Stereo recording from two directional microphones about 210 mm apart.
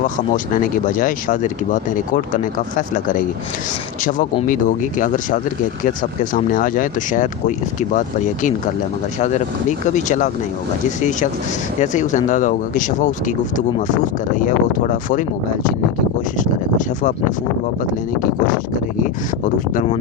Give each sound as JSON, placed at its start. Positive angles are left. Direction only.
{"t": 0.5, "sound": "speech", "side_deg": 40}
{"t": 4.4, "sound": "speech", "side_deg": 40}
{"t": 11.8, "sound": "speech", "side_deg": 35}
{"t": 16.4, "sound": "speech", "side_deg": 35}